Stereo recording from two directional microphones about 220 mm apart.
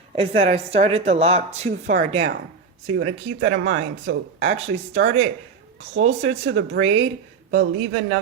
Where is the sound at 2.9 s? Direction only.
60° right (ahead or behind).